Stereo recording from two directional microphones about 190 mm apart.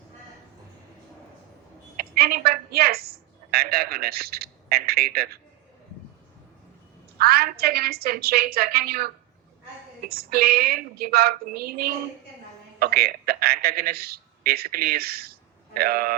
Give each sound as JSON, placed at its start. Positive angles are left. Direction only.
{"t": 2.0, "sound": "a woman's voice", "side_deg": -50}
{"t": 7.2, "sound": "a woman's voice", "side_deg": -55}
{"t": 10.1, "sound": "a woman's voice", "side_deg": -55}